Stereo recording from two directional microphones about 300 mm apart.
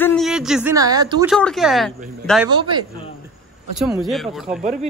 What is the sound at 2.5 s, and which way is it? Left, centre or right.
Speech, centre.